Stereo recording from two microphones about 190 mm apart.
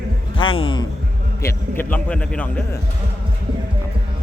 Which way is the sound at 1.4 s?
10° left (ahead or behind).